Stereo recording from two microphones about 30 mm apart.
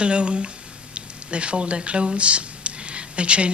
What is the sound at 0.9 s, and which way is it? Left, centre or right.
Speech, right.